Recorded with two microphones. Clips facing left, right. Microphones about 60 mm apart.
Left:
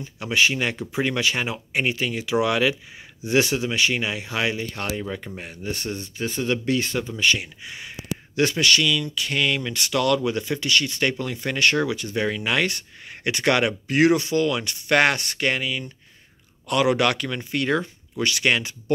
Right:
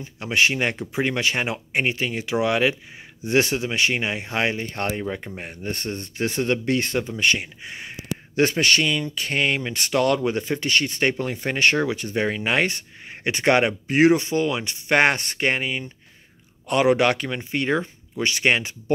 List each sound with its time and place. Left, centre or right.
0.0 s speech: right
5.4 s speech: right